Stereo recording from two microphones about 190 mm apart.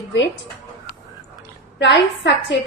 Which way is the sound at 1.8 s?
65° left (ahead or behind).